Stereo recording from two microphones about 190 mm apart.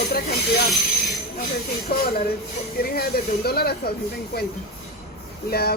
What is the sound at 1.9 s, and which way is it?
A woman's voice, 55° left (ahead or behind).